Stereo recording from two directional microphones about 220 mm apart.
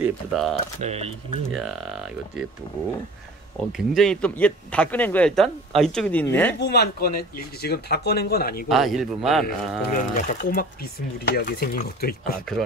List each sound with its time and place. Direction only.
0.0 s speech: centre (ahead or behind)
0.7 s speech: 30° right (ahead or behind)
1.5 s speech: centre (ahead or behind)
3.7 s speech: centre (ahead or behind)
6.6 s speech: 50° left (ahead or behind)
8.6 s speech: centre (ahead or behind)
9.9 s speech: 35° left (ahead or behind)